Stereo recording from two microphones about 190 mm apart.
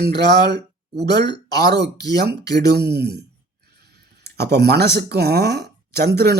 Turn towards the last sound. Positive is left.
turn(degrees=-55)  # may be behind; listen again after turning